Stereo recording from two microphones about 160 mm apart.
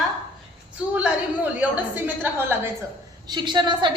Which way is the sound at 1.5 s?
10° right (ahead or behind).